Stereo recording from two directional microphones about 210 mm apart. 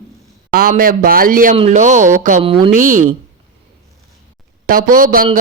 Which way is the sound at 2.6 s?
40° right (ahead or behind).